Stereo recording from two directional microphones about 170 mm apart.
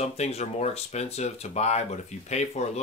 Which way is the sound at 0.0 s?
40° left (ahead or behind).